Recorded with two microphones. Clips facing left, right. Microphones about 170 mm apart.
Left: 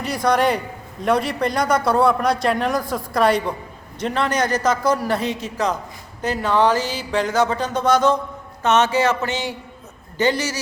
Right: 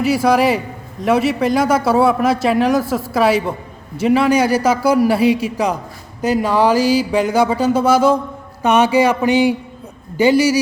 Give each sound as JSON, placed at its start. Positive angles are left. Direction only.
{"t": 0.0, "sound": "a man's voice", "side_deg": -5}